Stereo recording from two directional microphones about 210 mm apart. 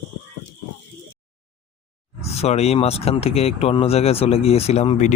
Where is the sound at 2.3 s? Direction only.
30° left (ahead or behind).